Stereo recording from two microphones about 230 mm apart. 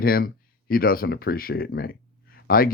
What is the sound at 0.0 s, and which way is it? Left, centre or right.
Speech, left.